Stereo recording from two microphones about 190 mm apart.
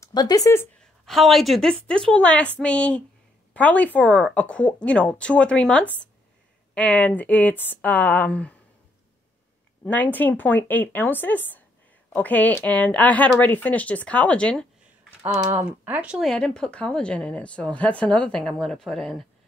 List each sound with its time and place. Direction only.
0.0 s speech: 20° left (ahead or behind)
1.0 s speech: centre (ahead or behind)
9.8 s speech: 10° left (ahead or behind)
15.4 s speech: 10° right (ahead or behind)